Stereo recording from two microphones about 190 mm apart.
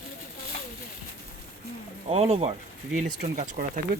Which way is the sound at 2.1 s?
30° right (ahead or behind).